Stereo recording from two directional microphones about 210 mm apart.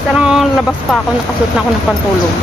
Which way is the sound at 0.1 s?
5° right (ahead or behind).